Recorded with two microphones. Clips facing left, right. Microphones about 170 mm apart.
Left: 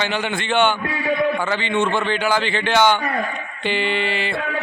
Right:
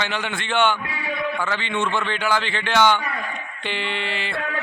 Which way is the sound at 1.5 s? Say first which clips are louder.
Left 4 dB; 5° left (ahead or behind).